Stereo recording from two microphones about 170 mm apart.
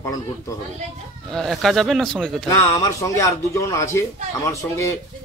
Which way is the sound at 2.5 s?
20° left (ahead or behind).